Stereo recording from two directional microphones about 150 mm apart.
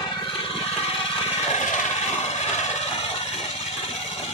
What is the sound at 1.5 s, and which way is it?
Jackhammer, 50° left (ahead or behind).